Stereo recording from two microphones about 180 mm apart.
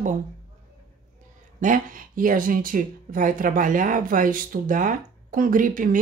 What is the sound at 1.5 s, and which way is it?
Speech, 45° right (ahead or behind).